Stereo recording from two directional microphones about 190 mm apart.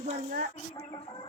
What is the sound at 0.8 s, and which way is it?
Chicken, 20° left (ahead or behind).